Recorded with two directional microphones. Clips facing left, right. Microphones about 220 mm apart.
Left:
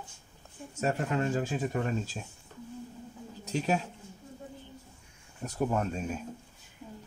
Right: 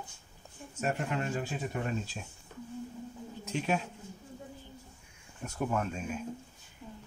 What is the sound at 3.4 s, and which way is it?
Speech, 40° left (ahead or behind).